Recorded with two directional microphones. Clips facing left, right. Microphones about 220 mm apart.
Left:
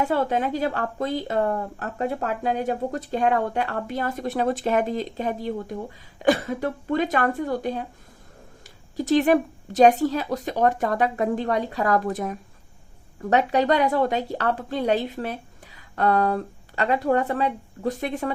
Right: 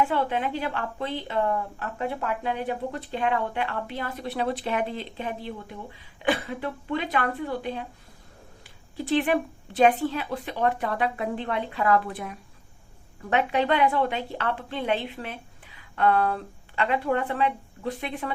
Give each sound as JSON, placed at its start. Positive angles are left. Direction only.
{"t": 0.0, "sound": "a woman's voice", "side_deg": 40}